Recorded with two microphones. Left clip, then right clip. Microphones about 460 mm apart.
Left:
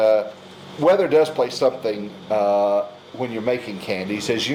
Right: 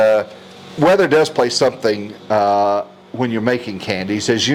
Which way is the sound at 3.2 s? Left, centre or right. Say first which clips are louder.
Right 5 dB; right.